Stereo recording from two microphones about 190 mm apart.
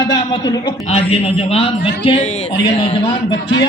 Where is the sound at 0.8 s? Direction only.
30° left (ahead or behind).